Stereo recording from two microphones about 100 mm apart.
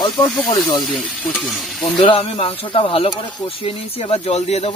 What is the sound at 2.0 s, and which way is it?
Speech, 65° left (ahead or behind).